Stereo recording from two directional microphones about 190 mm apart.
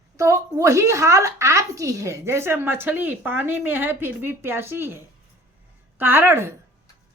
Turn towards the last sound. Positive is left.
turn(degrees=-10)  # may be behind; listen again after turning